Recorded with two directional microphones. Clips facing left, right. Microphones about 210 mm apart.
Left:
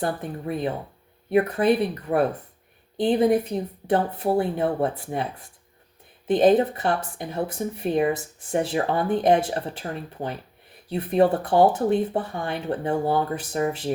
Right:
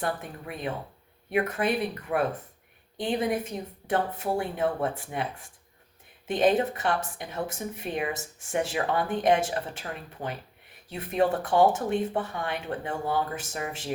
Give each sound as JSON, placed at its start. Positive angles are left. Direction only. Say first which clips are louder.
{"t": 0.0, "sound": "speech", "louder": "left 5 dB", "side_deg": 35}
{"t": 6.2, "sound": "speech", "louder": "left 6 dB", "side_deg": 35}